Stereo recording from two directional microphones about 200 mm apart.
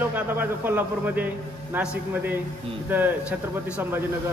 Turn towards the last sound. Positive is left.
turn(degrees=-10)  # may be behind; listen again after turning